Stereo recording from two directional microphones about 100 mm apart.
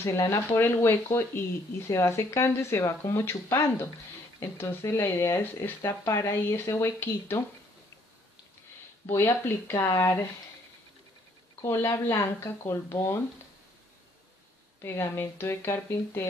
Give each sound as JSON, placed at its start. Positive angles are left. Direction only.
{"t": 0.0, "sound": "speech", "side_deg": 30}
{"t": 9.0, "sound": "speech", "side_deg": 25}
{"t": 11.6, "sound": "speech", "side_deg": 30}
{"t": 14.8, "sound": "speech", "side_deg": 25}